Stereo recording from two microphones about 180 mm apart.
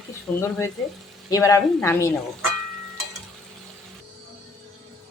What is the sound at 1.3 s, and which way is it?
Speech, 15° left (ahead or behind).